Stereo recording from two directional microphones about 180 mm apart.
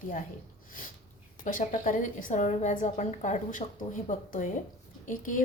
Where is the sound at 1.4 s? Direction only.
50° left (ahead or behind).